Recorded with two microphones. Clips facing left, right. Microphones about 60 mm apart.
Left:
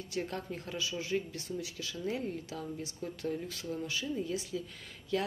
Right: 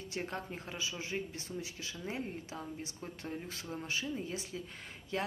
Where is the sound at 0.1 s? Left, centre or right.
Right.